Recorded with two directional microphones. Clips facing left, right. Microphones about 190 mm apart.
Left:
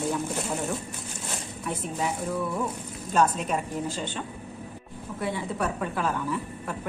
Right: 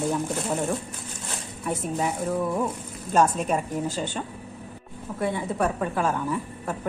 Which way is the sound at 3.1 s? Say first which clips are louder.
Right 3 dB; 45° right (ahead or behind).